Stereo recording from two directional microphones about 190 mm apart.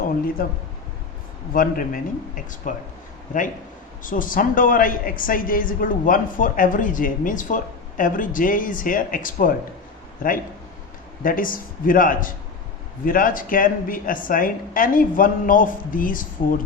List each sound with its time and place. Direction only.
1.5 s a woman's voice: 45° left (ahead or behind)
4.0 s a woman's voice: 45° left (ahead or behind)
11.2 s a woman's voice: 45° left (ahead or behind)